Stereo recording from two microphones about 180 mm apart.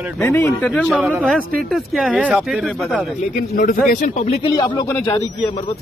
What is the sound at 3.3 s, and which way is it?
A man's voice, 50° left (ahead or behind).